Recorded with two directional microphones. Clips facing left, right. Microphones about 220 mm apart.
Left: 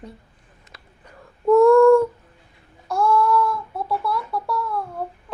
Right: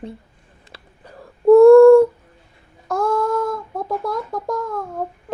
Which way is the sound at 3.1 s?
45° right (ahead or behind).